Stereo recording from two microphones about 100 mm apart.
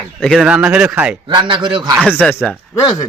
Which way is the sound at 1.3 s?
55° right (ahead or behind).